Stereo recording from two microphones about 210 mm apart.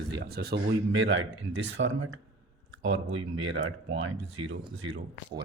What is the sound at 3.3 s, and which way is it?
Speech, 65° right (ahead or behind).